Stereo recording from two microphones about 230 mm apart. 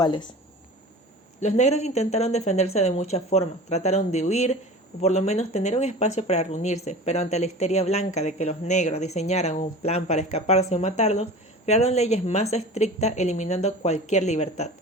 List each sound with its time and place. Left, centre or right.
0.0 s speech: centre
1.4 s speech: left